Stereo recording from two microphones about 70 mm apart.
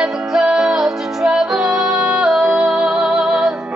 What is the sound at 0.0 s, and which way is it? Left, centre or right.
Music, centre.